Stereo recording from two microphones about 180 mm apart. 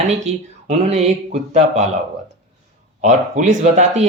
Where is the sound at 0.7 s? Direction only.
35° right (ahead or behind).